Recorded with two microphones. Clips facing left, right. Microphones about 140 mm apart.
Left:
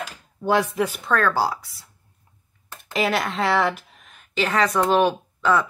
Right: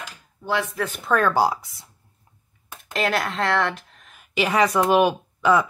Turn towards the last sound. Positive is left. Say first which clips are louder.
# right 2 dB
turn(degrees=-15)  # may be behind; listen again after turning